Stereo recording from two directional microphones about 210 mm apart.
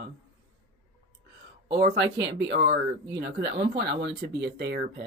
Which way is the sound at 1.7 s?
55° right (ahead or behind).